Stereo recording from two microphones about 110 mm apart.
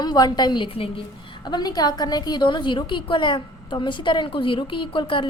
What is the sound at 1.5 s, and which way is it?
A woman's voice, 40° left (ahead or behind).